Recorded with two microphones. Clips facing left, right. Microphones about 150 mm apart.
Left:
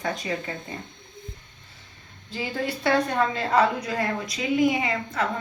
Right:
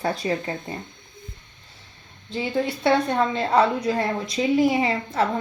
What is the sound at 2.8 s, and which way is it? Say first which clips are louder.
A woman's voice: right 1 dB; 25° right (ahead or behind).